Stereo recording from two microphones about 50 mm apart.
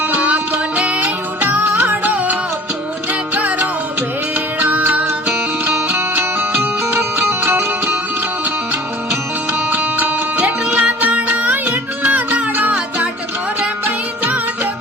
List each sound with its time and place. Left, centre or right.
0.2 s music: right
5.9 s music: right
9.5 s music: right